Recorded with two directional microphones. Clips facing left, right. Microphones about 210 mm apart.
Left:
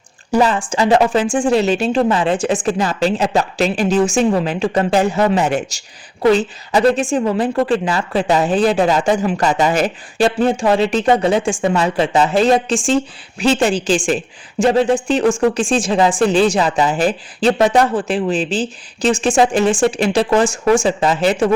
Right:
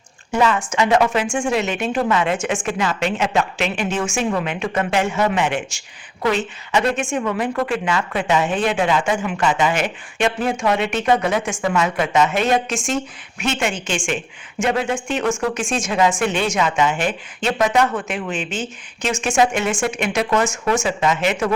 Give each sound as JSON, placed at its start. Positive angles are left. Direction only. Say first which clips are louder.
{"t": 0.3, "sound": "speech", "louder": "left 3 dB", "side_deg": 35}